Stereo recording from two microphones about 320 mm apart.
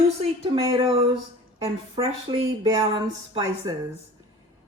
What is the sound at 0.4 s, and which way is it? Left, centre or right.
Speech, centre.